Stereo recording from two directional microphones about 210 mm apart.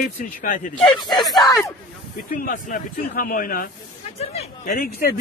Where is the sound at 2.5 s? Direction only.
40° left (ahead or behind).